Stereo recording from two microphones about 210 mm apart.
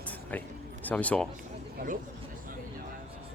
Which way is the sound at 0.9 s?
5° left (ahead or behind).